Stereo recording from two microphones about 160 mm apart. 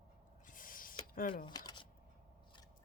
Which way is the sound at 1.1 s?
65° left (ahead or behind).